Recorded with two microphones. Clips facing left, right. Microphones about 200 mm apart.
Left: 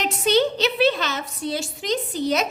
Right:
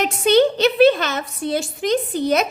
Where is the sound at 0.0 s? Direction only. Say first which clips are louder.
Right 5 dB; 55° right (ahead or behind).